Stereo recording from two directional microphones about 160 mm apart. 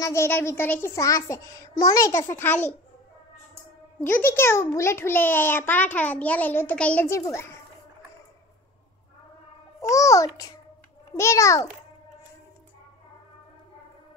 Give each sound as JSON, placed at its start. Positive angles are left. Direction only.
{"t": 0.0, "sound": "a child's voice", "side_deg": 15}
{"t": 4.0, "sound": "a child's voice", "side_deg": 15}
{"t": 9.8, "sound": "a child's voice", "side_deg": 20}